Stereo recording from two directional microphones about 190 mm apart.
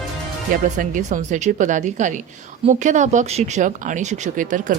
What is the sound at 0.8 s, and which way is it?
Speech, 40° right (ahead or behind).